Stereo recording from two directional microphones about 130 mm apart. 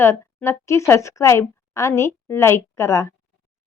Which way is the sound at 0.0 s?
20° left (ahead or behind).